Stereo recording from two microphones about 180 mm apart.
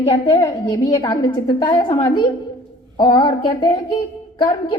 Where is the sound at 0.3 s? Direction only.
20° left (ahead or behind).